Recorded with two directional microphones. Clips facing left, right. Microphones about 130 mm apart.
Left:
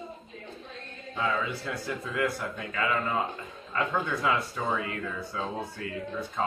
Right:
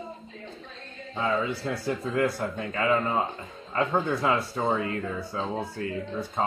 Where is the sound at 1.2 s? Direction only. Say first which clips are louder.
Right 3 dB; 25° right (ahead or behind).